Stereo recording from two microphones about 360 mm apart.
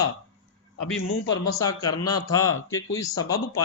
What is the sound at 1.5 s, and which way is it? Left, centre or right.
Speech, centre.